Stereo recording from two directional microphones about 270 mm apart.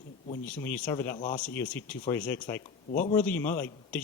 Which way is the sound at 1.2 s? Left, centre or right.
Left.